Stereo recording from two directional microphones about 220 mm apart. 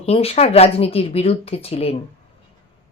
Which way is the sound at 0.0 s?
25° left (ahead or behind).